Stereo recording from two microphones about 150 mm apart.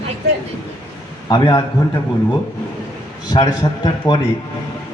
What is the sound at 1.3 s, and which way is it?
Speech, 30° left (ahead or behind).